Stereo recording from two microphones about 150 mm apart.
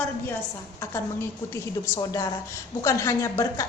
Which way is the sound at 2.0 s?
25° left (ahead or behind).